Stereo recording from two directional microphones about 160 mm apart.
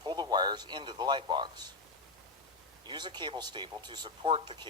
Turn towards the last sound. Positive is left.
turn(degrees=-30)  # may be behind; listen again after turning